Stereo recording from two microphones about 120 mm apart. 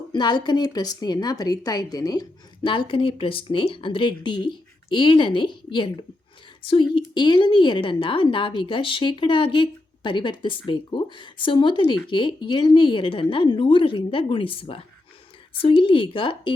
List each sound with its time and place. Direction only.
0.1 s a woman's voice: 35° left (ahead or behind)
2.6 s a woman's voice: 45° left (ahead or behind)